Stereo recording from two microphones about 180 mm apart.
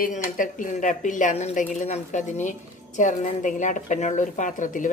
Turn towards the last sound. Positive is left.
turn(degrees=45)  # may be behind; listen again after turning